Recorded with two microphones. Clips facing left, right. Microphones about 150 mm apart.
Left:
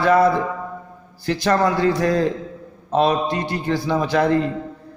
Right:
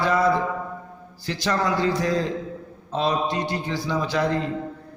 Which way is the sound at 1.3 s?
55° left (ahead or behind).